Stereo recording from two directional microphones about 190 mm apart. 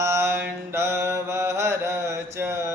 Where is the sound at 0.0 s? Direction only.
15° right (ahead or behind).